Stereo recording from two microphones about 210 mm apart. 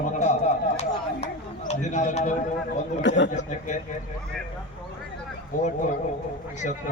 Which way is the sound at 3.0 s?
60° left (ahead or behind).